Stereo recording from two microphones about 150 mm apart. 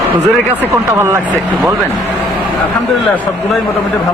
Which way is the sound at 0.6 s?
20° right (ahead or behind).